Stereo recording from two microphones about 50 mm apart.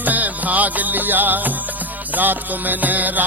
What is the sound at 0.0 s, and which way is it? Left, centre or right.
Music, right.